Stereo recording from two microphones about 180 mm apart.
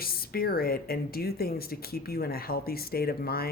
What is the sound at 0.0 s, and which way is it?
Speech, 55° left (ahead or behind).